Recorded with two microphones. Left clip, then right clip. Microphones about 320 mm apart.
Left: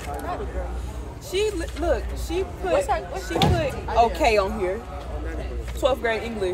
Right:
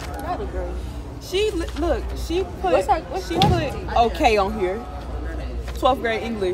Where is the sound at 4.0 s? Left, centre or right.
Centre.